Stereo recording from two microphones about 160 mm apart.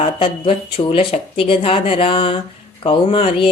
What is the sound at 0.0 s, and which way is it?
Speech, 35° left (ahead or behind).